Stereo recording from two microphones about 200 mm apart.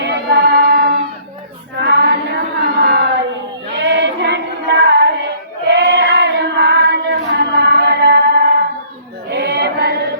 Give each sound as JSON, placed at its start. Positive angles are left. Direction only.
{"t": 0.0, "sound": "choir", "side_deg": -55}
{"t": 1.8, "sound": "chant", "side_deg": -60}
{"t": 3.8, "sound": "a sound", "side_deg": -60}
{"t": 7.9, "sound": "music", "side_deg": -55}
{"t": 9.3, "sound": "chant", "side_deg": -55}